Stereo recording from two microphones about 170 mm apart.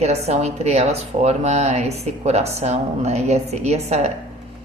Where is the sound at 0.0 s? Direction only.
40° right (ahead or behind).